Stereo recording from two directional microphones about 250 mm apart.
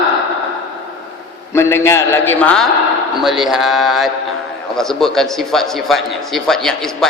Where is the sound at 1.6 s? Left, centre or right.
Centre.